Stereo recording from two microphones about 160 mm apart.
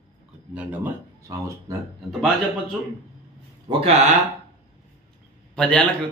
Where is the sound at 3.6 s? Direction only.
40° right (ahead or behind).